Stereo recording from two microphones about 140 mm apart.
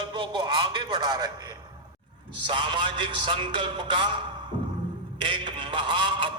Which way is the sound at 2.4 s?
35° right (ahead or behind).